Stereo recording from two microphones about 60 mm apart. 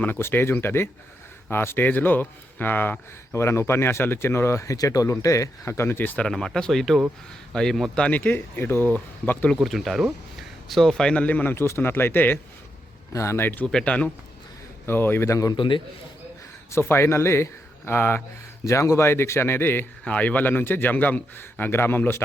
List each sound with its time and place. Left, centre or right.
0.2 s a man's voice: left
3.3 s speech: left
6.1 s speech: centre
8.0 s a man's voice: left
9.6 s a man's voice: centre; by 11.5 s left
11.5 s speech: left
11.8 s a man's voice: left
13.1 s speech: left
13.8 s speech: left
14.8 s a man's voice: left
15.3 s a man's voice: left
16.7 s speech: left
18.6 s speech: left
20.1 s a man's voice: left